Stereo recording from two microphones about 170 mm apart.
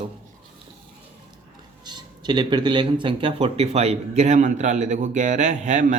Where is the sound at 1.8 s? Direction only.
25° right (ahead or behind).